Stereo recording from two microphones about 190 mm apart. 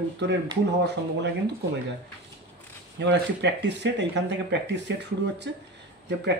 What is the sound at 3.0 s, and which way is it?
Speech, 65° right (ahead or behind).